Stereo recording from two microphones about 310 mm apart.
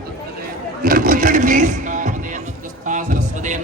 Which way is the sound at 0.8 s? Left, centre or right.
Right.